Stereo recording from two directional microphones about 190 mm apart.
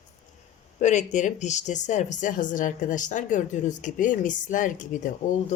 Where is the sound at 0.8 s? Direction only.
40° left (ahead or behind).